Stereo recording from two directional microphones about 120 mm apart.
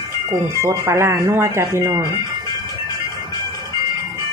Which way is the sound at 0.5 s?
25° right (ahead or behind).